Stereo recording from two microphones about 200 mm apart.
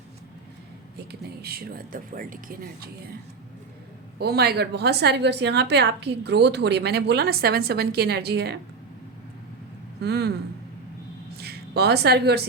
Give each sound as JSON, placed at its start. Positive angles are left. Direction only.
{"t": 0.9, "sound": "speech", "side_deg": -50}
{"t": 4.2, "sound": "a woman's voice", "side_deg": -50}
{"t": 10.0, "sound": "a woman's voice", "side_deg": -55}
{"t": 11.3, "sound": "a woman's voice", "side_deg": -55}